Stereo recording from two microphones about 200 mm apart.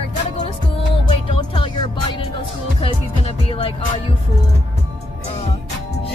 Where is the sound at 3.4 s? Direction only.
25° left (ahead or behind).